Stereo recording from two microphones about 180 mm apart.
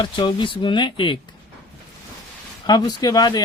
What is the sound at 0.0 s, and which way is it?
Speech, 25° left (ahead or behind).